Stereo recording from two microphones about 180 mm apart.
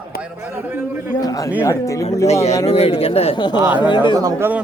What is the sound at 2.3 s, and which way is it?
Speech, 35° left (ahead or behind).